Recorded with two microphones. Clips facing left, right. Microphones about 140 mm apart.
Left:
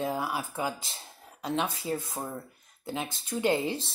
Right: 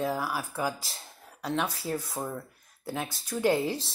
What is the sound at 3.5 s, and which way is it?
Speech, centre (ahead or behind).